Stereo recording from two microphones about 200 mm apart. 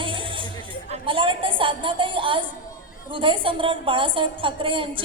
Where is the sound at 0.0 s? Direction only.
25° right (ahead or behind).